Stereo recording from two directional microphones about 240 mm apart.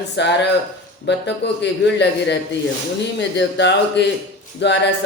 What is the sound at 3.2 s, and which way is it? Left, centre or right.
Speech, left.